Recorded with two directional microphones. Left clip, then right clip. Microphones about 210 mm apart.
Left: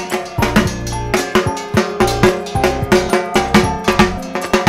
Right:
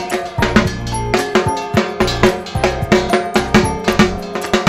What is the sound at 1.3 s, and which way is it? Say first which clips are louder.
Music: right 1 dB; 50° left (ahead or behind).